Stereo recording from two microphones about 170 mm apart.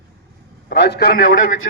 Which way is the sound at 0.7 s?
80° left.